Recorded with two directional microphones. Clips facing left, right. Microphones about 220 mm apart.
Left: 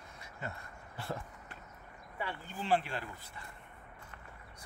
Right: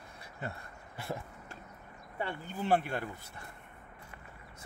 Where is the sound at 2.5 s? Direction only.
60° right (ahead or behind).